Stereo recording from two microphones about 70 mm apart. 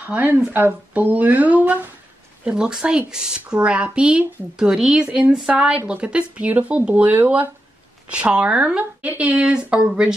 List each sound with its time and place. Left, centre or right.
0.0 s speech: right
2.4 s speech: centre